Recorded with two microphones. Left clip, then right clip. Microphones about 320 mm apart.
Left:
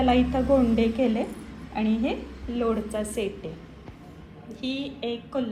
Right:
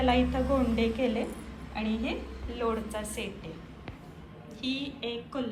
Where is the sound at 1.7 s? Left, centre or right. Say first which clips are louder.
Left 6 dB; centre.